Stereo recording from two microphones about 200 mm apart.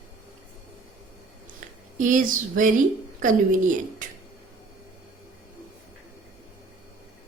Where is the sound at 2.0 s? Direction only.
40° right (ahead or behind).